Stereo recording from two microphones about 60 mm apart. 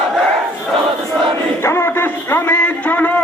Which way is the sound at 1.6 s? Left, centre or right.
Left.